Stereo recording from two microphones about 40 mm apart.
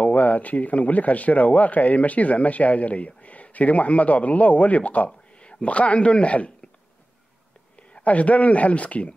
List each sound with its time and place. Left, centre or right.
0.0 s speech: left
8.0 s speech: left